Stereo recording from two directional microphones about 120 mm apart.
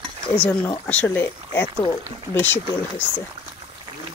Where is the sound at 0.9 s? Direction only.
15° left (ahead or behind).